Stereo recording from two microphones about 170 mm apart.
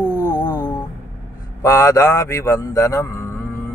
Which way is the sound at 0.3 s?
20° left (ahead or behind).